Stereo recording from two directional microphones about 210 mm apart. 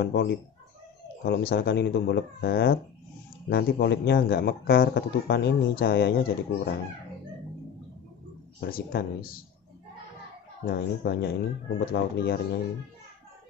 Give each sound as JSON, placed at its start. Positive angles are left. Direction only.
{"t": 0.0, "sound": "speech", "side_deg": 50}
{"t": 8.5, "sound": "speech", "side_deg": 45}
{"t": 10.6, "sound": "speech", "side_deg": 50}